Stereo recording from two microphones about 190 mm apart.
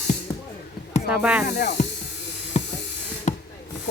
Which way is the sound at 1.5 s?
55° left (ahead or behind).